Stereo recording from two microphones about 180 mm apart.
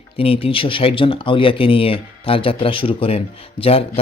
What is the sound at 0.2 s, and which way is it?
Speech, 30° left (ahead or behind).